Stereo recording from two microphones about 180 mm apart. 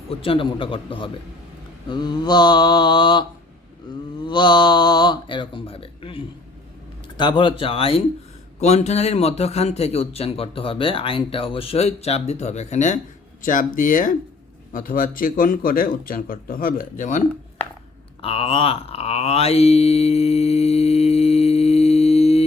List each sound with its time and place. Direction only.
0.1 s a man's voice: 30° left (ahead or behind)
18.2 s mantra: 30° left (ahead or behind)